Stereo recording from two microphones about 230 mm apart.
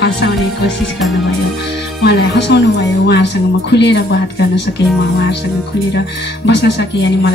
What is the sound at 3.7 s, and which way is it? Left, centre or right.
Speech, left.